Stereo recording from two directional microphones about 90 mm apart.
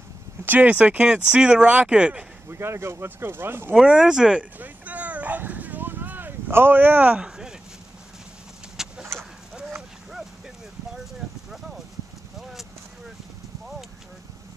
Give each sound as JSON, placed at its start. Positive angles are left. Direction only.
{"t": 0.5, "sound": "speech", "side_deg": -15}
{"t": 2.5, "sound": "speech", "side_deg": -30}
{"t": 3.8, "sound": "bow-wow", "side_deg": -10}
{"t": 8.7, "sound": "bird", "side_deg": -5}
{"t": 12.4, "sound": "a sound", "side_deg": -5}